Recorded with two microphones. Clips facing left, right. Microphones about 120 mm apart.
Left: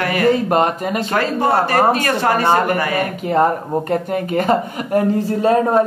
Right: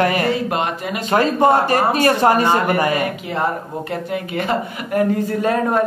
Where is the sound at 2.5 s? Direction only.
45° left (ahead or behind).